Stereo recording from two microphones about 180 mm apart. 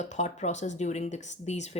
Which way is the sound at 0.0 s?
40° left (ahead or behind).